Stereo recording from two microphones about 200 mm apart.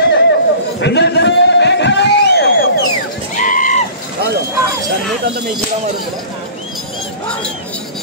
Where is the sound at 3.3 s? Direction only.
40° left (ahead or behind).